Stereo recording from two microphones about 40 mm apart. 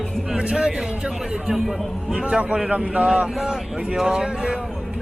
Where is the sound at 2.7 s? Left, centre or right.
Right.